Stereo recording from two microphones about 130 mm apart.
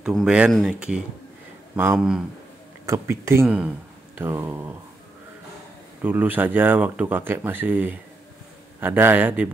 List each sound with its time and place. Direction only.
0.0 s speech: 5° right (ahead or behind)
2.9 s speech: 20° right (ahead or behind)
3.4 s speech: 10° right (ahead or behind)
4.2 s speech: 20° right (ahead or behind)
6.0 s speech: 15° right (ahead or behind)